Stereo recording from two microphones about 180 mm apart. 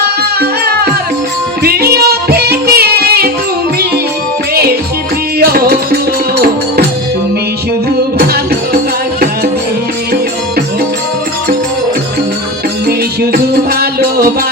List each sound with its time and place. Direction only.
0.2 s music: 60° right (ahead or behind)
5.4 s music: 60° right (ahead or behind)
8.2 s music: 55° right (ahead or behind)
13.3 s music: 60° right (ahead or behind)